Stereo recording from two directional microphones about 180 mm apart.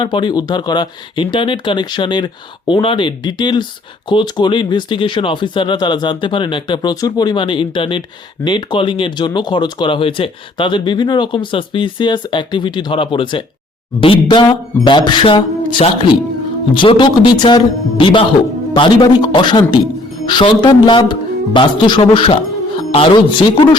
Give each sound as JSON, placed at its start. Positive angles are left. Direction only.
{"t": 0.0, "sound": "speech", "side_deg": 25}